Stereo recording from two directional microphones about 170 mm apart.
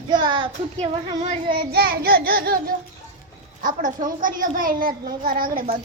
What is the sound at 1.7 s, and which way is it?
A child's voice, 65° right (ahead or behind).